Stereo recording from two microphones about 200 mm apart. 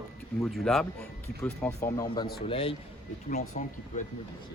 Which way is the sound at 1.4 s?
15° left (ahead or behind).